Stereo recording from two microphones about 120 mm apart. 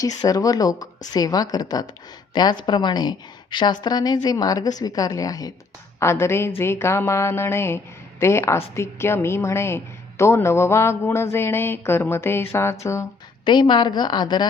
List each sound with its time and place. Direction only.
0.0 s a woman's voice: 30° left (ahead or behind)
13.4 s a woman's voice: 40° left (ahead or behind)